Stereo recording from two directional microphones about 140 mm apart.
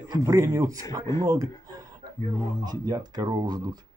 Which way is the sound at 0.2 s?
20° right (ahead or behind).